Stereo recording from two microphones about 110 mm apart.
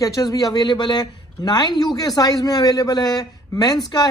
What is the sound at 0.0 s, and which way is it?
Speech, 35° left (ahead or behind).